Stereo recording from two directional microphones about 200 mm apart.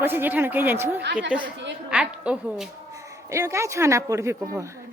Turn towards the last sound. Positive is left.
turn(degrees=-15)  # may be behind; listen again after turning